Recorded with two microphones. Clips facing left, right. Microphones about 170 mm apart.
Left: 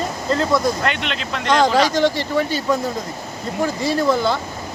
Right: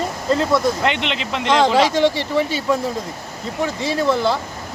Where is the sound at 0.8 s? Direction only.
20° right (ahead or behind).